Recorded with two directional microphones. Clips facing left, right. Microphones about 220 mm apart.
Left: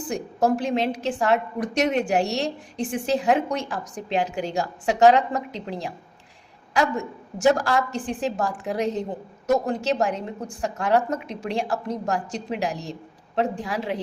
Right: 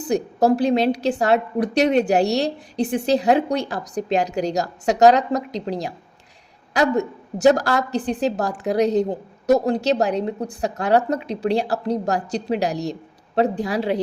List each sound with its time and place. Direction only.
0.0 s a woman's voice: 35° right (ahead or behind)